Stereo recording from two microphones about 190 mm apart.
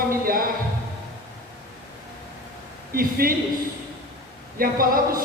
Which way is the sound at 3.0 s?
50° right (ahead or behind).